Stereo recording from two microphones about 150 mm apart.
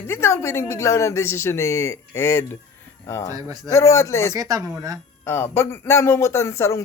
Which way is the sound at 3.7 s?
20° left (ahead or behind).